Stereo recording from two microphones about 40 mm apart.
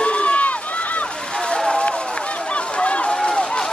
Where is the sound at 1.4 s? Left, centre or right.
Left.